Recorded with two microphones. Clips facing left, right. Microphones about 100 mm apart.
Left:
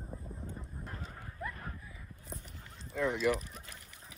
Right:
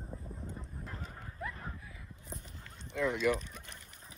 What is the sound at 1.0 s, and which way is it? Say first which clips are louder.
Dog: even; centre (ahead or behind).